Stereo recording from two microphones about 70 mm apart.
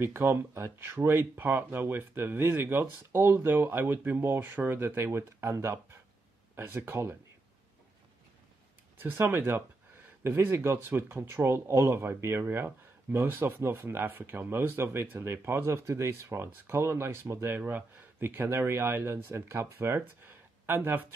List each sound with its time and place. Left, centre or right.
0.0 s speech: right
8.9 s speech: right